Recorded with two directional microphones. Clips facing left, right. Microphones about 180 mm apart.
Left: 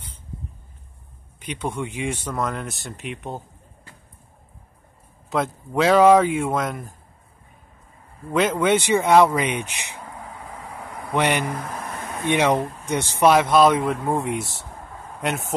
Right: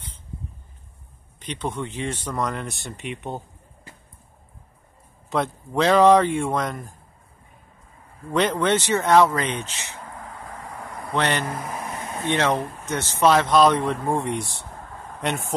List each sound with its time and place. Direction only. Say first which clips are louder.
1.4 s speech: left 1 dB; 10° left (ahead or behind)
5.3 s speech: left 1 dB; centre (ahead or behind)
8.3 s speech: left 2 dB; 5° left (ahead or behind)
10.7 s vehicle: left 1 dB; 5° left (ahead or behind)
11.1 s speech: left 2 dB; 10° left (ahead or behind)
14.4 s speech: left 1 dB; 45° left (ahead or behind)
15.0 s a sound: left 1 dB; 5° left (ahead or behind)